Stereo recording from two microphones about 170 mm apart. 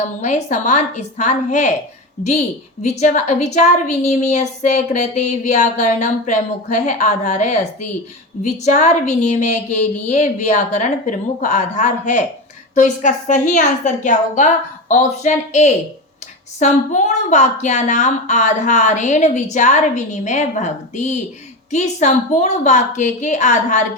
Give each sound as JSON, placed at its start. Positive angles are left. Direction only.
{"t": 0.0, "sound": "a woman's voice", "side_deg": 40}
{"t": 2.8, "sound": "a woman's voice", "side_deg": 40}